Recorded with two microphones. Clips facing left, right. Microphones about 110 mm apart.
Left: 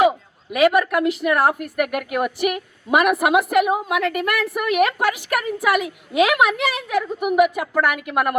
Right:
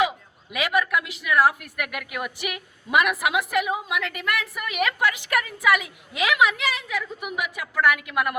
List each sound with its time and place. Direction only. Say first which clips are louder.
0.5 s a woman's voice: left 7 dB; 45° left (ahead or behind)